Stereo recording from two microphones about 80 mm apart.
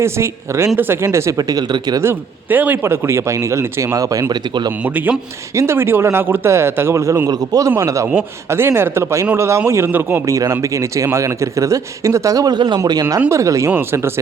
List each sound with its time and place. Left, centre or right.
0.0 s speech: right
1.4 s speech: right
2.5 s a man's voice: right
2.7 s speech: right
3.9 s a man's voice: right
4.3 s speech: right
4.8 s a man's voice: right
5.5 s speech: right
7.3 s a man's voice: right
7.8 s speech: right
10.2 s speech: right
12.5 s speech: right
12.9 s a man's voice: right